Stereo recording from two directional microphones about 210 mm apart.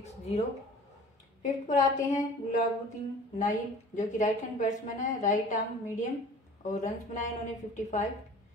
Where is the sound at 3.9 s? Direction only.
35° left (ahead or behind).